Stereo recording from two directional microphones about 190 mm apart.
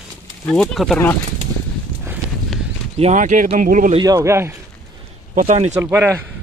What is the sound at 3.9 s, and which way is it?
Speech, 20° right (ahead or behind).